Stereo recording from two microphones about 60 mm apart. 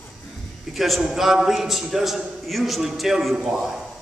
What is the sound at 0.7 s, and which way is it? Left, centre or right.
A man's voice, centre.